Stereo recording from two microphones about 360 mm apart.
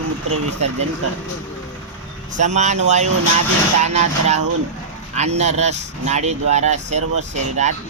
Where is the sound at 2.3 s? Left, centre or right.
Centre.